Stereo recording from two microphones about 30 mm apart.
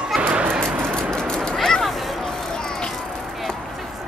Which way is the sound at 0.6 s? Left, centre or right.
Left.